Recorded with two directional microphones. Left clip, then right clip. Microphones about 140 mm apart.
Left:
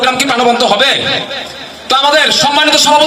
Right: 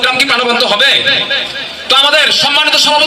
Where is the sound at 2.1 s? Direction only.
45° left (ahead or behind).